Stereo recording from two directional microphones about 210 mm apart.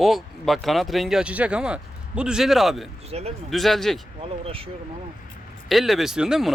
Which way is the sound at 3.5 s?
Centre (ahead or behind).